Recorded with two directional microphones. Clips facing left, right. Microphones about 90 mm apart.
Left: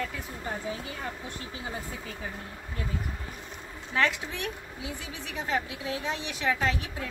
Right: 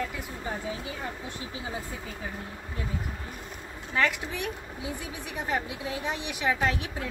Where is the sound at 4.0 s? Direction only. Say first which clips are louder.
Even; 10° right (ahead or behind).